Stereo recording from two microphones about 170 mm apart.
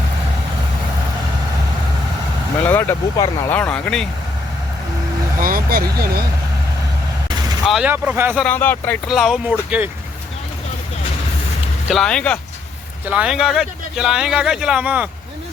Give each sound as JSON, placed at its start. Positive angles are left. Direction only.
{"t": 2.6, "sound": "vehicle", "side_deg": 10}
{"t": 3.5, "sound": "speech", "side_deg": 10}
{"t": 5.4, "sound": "speech", "side_deg": -55}
{"t": 7.6, "sound": "speech", "side_deg": 0}
{"t": 7.9, "sound": "speech", "side_deg": -10}
{"t": 8.4, "sound": "speech", "side_deg": 10}
{"t": 9.0, "sound": "speech", "side_deg": 0}
{"t": 11.9, "sound": "speech", "side_deg": 5}
{"t": 13.1, "sound": "speech", "side_deg": -5}